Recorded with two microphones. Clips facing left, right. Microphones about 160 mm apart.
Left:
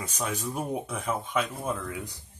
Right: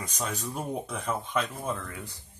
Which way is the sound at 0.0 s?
10° left (ahead or behind).